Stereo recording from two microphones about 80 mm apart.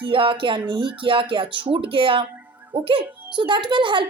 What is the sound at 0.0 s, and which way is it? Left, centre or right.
Speech, right.